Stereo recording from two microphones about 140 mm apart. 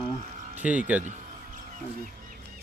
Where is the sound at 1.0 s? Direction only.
70° right (ahead or behind).